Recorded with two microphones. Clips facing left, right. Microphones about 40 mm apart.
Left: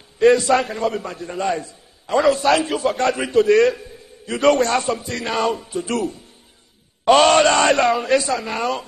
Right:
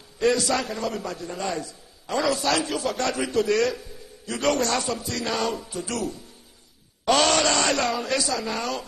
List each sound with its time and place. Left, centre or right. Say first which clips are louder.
0.2 s a man's voice: left 8 dB; left